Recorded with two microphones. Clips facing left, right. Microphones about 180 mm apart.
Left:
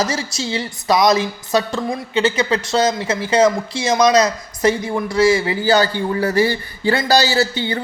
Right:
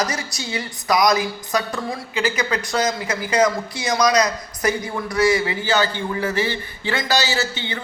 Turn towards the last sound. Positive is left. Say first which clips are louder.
# left 6 dB
turn(degrees=35)  # may be behind; listen again after turning